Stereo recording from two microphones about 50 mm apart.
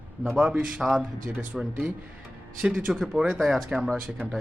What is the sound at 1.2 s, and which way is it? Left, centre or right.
Speech, right.